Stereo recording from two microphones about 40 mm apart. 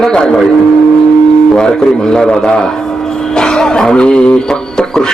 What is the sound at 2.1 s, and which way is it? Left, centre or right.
A man's voice, left.